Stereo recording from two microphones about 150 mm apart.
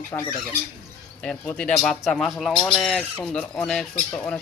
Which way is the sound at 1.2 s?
10° left (ahead or behind).